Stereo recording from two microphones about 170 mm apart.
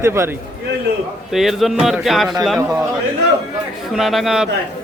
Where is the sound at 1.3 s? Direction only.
Centre (ahead or behind).